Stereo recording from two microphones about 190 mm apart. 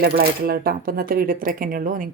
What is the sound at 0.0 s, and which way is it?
Speech, 55° right (ahead or behind).